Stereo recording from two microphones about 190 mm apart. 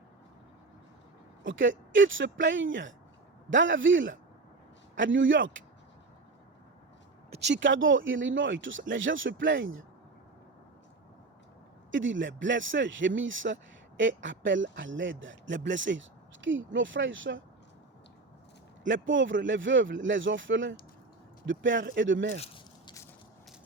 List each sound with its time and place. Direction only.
1.5 s speech: 80° right
7.3 s speech: 60° right (ahead or behind); by 9.8 s 90° right
11.9 s speech: 80° right
19.0 s speech: 85° right
22.4 s biting: 25° left (ahead or behind)